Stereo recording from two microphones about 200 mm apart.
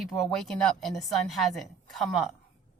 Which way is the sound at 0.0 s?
Centre (ahead or behind).